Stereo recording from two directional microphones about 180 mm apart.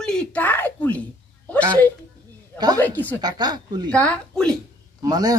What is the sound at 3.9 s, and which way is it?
Speech, 5° left (ahead or behind).